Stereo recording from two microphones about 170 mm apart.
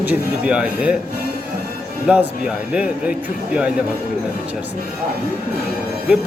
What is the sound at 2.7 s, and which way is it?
Speech, 5° right (ahead or behind).